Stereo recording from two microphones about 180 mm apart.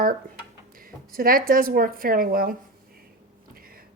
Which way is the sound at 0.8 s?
55° right (ahead or behind).